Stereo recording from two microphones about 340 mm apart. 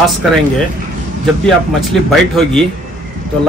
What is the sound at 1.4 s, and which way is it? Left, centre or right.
A man's voice, centre.